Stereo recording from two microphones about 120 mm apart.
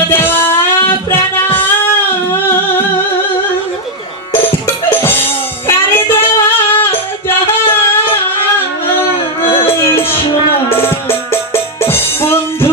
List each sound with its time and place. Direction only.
0.1 s music: 15° left (ahead or behind)
4.3 s music: 20° left (ahead or behind)
9.4 s music: 55° left (ahead or behind)
9.8 s music: 20° left (ahead or behind)